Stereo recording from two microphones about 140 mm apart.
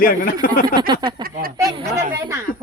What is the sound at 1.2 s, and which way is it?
Speech, 90° right.